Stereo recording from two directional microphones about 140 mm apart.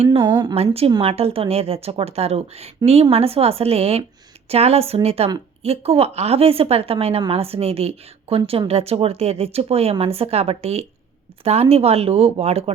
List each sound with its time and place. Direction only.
0.2 s speech: 20° right (ahead or behind)
0.5 s a woman's voice: 45° right (ahead or behind)